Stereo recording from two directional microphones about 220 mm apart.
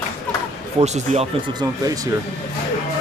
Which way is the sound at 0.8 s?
30° right (ahead or behind).